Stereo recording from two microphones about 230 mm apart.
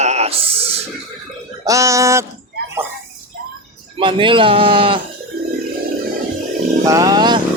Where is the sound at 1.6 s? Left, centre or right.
Centre.